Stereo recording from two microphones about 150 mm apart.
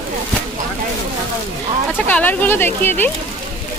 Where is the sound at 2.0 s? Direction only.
10° left (ahead or behind).